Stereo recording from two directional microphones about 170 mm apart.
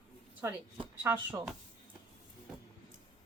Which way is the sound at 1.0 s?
10° right (ahead or behind).